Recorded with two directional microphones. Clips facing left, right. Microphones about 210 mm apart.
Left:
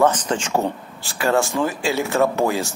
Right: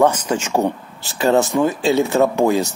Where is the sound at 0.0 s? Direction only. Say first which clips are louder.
Right 2 dB; 10° right (ahead or behind).